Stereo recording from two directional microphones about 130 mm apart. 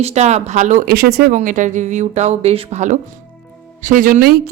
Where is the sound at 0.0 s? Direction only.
55° right (ahead or behind).